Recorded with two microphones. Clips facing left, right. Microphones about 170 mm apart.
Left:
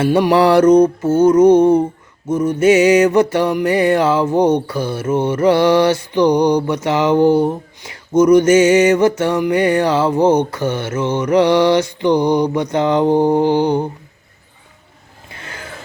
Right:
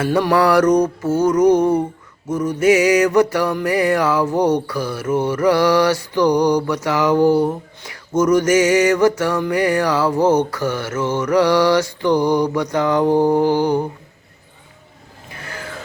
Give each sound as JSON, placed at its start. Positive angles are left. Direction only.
{"t": 0.0, "sound": "mantra", "side_deg": 20}